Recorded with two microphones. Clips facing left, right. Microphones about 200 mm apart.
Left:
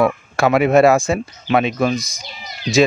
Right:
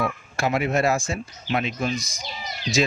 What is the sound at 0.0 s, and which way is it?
Speech, 70° left (ahead or behind).